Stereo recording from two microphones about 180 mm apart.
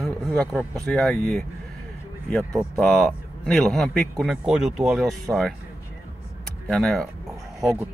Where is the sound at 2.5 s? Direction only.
Centre (ahead or behind).